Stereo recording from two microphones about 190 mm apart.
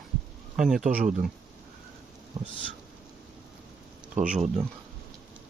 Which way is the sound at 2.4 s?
20° right (ahead or behind).